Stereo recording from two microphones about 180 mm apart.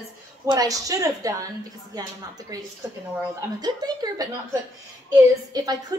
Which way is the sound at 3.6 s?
20° right (ahead or behind).